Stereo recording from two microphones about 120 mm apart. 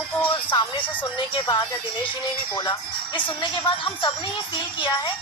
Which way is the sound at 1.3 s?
40° left (ahead or behind).